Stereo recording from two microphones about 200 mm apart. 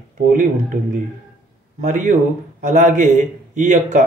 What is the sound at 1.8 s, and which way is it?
A man's voice, 40° right (ahead or behind).